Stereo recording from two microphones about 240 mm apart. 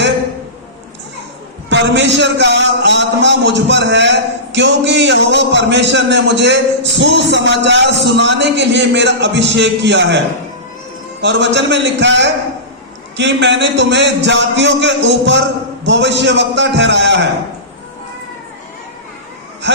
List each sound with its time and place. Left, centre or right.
1.7 s a man's voice: right
11.2 s a man's voice: right